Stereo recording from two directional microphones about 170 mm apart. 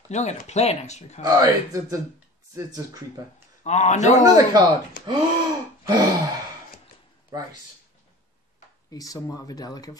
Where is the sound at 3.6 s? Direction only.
40° left (ahead or behind).